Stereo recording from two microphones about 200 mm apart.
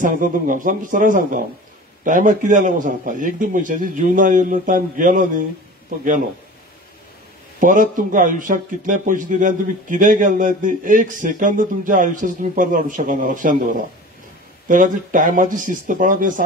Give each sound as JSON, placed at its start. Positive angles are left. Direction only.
{"t": 0.0, "sound": "a man's voice", "side_deg": -40}
{"t": 7.6, "sound": "a man's voice", "side_deg": -40}